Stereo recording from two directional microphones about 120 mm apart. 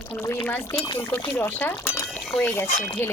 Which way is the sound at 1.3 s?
15° left (ahead or behind).